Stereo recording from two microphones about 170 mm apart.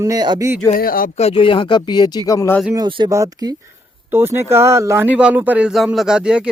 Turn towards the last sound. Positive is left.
turn(degrees=-5)  # may be behind; listen again after turning